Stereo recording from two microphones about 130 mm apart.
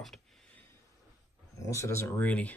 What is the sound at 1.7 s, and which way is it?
Speech, 20° left (ahead or behind).